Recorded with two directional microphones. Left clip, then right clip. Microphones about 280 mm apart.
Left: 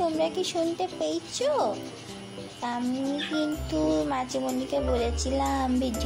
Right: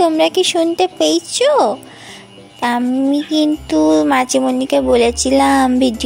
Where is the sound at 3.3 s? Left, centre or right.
Right.